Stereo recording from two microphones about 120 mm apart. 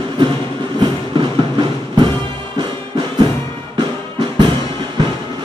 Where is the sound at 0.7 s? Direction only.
40° right (ahead or behind).